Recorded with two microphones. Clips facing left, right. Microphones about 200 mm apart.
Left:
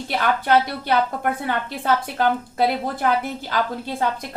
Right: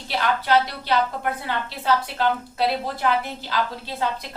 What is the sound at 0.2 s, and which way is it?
A woman's voice, 50° left (ahead or behind).